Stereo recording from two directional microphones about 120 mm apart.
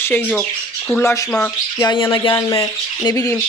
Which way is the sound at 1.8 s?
40° left (ahead or behind).